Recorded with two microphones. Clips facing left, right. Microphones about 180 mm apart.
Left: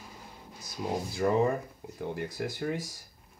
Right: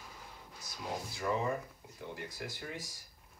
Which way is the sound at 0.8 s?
45° left (ahead or behind).